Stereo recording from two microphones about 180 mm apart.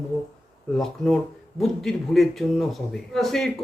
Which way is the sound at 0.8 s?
Centre (ahead or behind).